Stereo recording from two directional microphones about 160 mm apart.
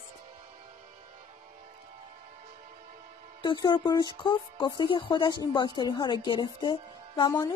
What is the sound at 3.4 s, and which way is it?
Speech, 30° left (ahead or behind).